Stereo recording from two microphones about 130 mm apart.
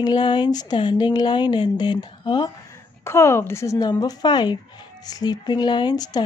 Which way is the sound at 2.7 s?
20° left (ahead or behind).